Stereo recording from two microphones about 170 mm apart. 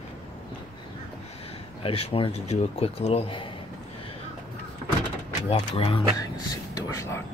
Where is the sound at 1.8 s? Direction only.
35° left (ahead or behind).